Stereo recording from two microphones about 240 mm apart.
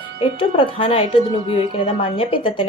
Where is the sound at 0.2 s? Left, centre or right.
Left.